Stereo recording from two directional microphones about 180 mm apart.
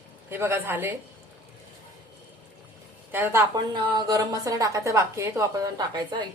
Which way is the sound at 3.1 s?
10° right (ahead or behind).